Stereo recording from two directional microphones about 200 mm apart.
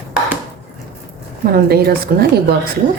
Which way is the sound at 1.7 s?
50° right (ahead or behind).